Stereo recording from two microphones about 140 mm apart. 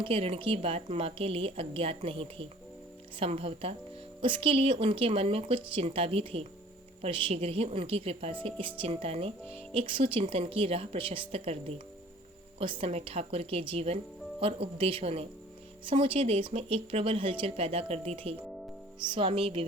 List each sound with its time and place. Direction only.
0.0 s a woman's voice: 40° right (ahead or behind)
12.5 s speech: 40° right (ahead or behind)